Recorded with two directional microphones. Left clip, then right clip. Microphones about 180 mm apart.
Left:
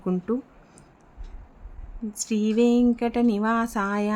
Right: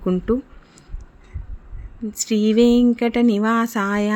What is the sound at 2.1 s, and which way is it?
A woman's voice, 15° right (ahead or behind).